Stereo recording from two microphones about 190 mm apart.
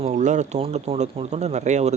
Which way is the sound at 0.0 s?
40° right (ahead or behind).